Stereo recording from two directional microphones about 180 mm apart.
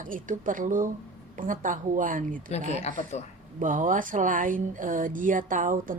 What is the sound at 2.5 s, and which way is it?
Speech, 35° left (ahead or behind).